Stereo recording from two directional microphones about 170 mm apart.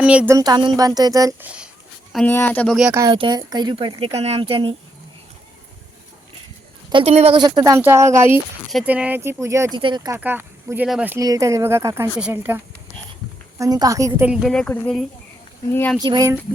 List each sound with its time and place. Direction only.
0.0 s speech: 5° right (ahead or behind)
0.3 s speech: 25° right (ahead or behind)
1.4 s speech: 5° right (ahead or behind)
2.1 s speech: 10° left (ahead or behind)
3.1 s speech: 30° right (ahead or behind)
6.9 s speech: 35° right (ahead or behind)
7.4 s speech: 20° right (ahead or behind)
10.2 s speech: 10° right (ahead or behind)
11.2 s speech: 20° right (ahead or behind)
14.3 s speech: 5° right (ahead or behind)
16.0 s speech: 25° right (ahead or behind)